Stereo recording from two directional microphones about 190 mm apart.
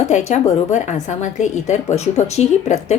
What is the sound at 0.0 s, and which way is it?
A woman's voice, 40° left (ahead or behind).